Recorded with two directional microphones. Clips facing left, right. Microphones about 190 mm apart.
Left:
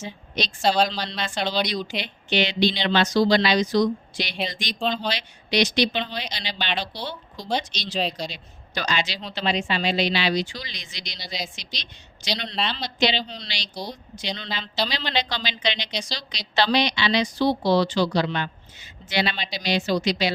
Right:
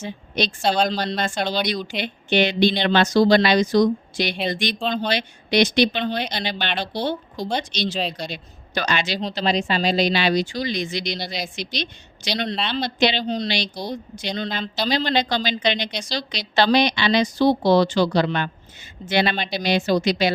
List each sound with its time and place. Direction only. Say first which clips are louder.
0.0 s a woman's voice: right 5 dB; 55° right (ahead or behind)
0.6 s speech: left 1 dB; centre (ahead or behind)
0.9 s speech: right 6 dB; 50° right (ahead or behind)